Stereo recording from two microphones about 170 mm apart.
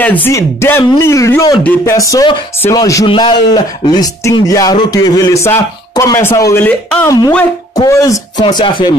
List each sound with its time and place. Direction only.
0.0 s speech: 10° left (ahead or behind)
1.6 s music: 15° left (ahead or behind)
7.7 s music: 20° left (ahead or behind)